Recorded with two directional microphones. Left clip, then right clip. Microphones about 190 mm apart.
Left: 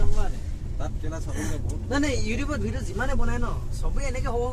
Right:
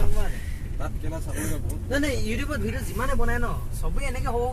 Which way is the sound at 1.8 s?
20° left (ahead or behind).